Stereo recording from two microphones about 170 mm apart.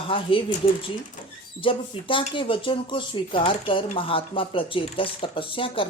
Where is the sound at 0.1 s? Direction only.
30° left (ahead or behind).